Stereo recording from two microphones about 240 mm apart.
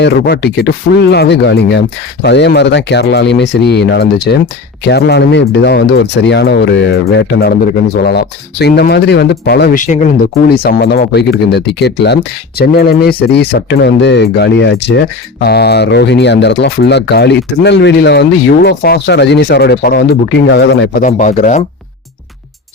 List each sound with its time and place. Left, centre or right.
0.0 s speech: left